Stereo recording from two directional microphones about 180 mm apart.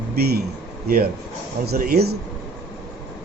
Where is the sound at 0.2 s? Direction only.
60° right (ahead or behind).